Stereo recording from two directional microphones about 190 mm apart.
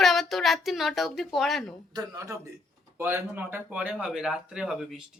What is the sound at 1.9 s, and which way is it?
A man's voice, 15° right (ahead or behind).